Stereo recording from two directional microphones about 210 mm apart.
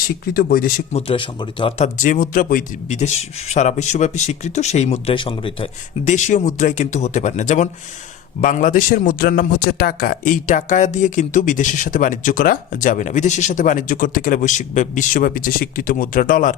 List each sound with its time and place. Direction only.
0.3 s speech: 45° left (ahead or behind)
0.9 s speech: 25° left (ahead or behind)
2.0 s a man's voice: 40° left (ahead or behind)